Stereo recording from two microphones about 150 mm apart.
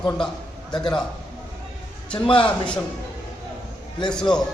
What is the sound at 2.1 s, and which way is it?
Speech, 35° left (ahead or behind).